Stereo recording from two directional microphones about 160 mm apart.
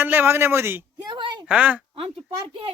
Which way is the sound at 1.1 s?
30° right (ahead or behind).